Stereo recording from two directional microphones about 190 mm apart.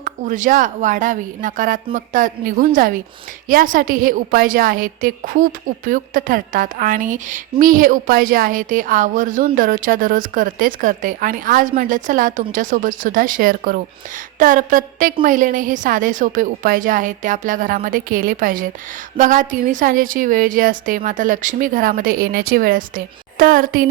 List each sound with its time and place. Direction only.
0.0 s a woman's voice: 40° right (ahead or behind)